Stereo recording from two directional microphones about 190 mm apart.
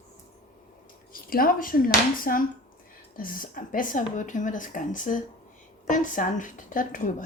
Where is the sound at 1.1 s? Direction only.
50° left (ahead or behind).